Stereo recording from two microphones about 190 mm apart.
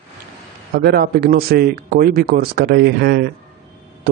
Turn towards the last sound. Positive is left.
turn(degrees=-55)  # may be behind; listen again after turning